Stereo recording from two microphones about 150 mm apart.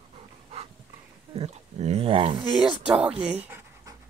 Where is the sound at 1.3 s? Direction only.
45° right (ahead or behind).